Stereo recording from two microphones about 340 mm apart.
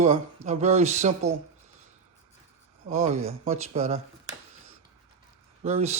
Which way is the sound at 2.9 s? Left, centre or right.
Centre.